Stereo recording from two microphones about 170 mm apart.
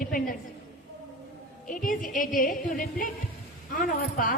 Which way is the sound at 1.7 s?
55° left (ahead or behind).